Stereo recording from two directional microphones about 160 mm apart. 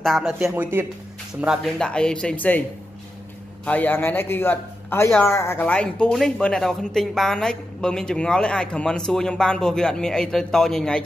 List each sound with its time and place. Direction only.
0.0 s speech: centre (ahead or behind)
1.4 s a man's voice: 5° right (ahead or behind)
3.6 s a man's voice: 10° left (ahead or behind)